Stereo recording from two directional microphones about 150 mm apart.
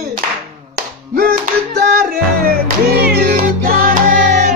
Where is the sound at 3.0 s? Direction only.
85° right.